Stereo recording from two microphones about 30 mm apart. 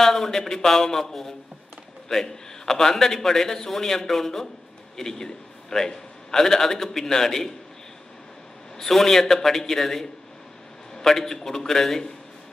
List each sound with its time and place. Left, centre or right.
0.0 s a man's voice: centre
8.7 s a man's voice: centre